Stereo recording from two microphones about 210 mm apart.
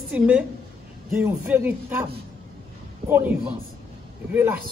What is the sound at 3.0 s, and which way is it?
Speech, 10° right (ahead or behind).